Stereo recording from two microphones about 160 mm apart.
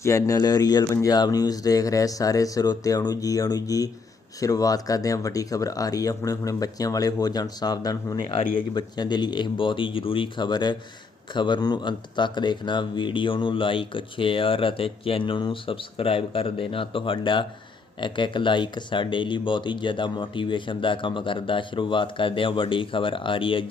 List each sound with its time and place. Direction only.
0.0 s speech: 20° left (ahead or behind)